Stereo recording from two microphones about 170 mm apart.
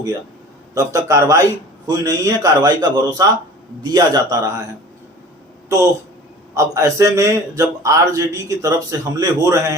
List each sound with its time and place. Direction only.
0.7 s a man's voice: 20° right (ahead or behind)
5.6 s a man's voice: 15° right (ahead or behind)